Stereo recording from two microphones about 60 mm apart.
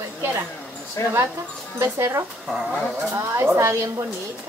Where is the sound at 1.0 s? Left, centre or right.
Left.